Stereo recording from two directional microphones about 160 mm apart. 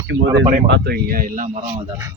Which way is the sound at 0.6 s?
85° right.